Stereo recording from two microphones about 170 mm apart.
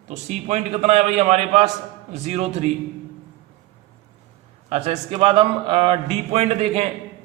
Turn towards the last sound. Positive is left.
turn(degrees=-40)  # may be behind; listen again after turning